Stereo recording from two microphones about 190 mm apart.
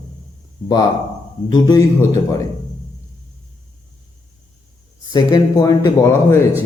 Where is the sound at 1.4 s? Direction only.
20° left (ahead or behind).